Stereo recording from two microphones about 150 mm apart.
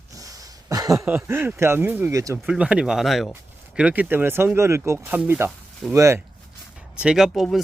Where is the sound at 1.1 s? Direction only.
15° right (ahead or behind).